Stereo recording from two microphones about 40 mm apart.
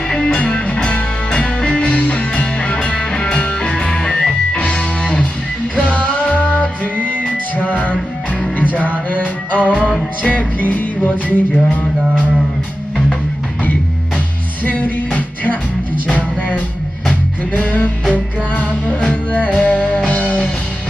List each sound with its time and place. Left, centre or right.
0.1 s music: left
0.3 s music: left
5.7 s music: left
6.8 s music: right
7.5 s music: left
14.6 s music: left